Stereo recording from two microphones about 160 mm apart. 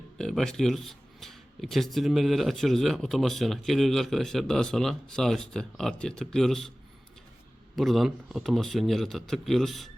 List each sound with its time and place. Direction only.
0.2 s speech: 5° left (ahead or behind)
7.8 s speech: centre (ahead or behind)